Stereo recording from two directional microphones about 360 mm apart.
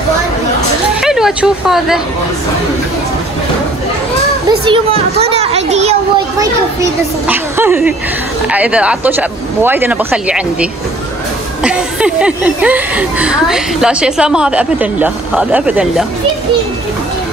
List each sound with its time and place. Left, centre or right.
1.0 s speech: centre
4.5 s a child's voice: centre
6.4 s a child's voice: centre